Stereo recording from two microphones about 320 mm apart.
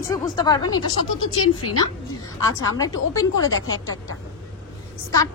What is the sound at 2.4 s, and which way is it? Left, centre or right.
A woman's voice, centre.